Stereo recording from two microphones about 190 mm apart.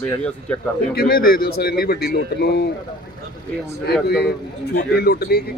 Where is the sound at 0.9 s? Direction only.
55° left (ahead or behind).